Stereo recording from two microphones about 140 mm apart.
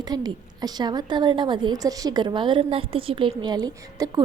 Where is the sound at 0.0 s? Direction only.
30° right (ahead or behind).